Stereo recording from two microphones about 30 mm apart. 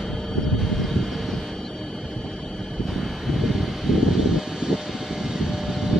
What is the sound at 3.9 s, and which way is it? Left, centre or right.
Vehicle, right.